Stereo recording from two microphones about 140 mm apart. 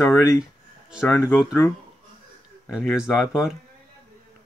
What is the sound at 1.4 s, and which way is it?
Speech, 20° left (ahead or behind).